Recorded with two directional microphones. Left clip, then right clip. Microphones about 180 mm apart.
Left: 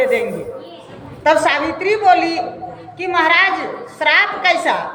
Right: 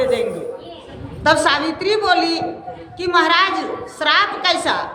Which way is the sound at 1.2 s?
25° right (ahead or behind).